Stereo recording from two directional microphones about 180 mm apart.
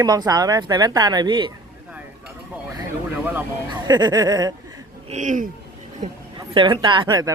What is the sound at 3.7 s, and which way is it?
Speech, 25° right (ahead or behind).